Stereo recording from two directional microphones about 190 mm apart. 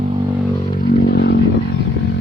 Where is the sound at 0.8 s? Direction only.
60° left (ahead or behind).